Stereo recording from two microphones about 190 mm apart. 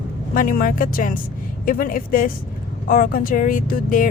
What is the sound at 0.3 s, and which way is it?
Speech, 45° left (ahead or behind).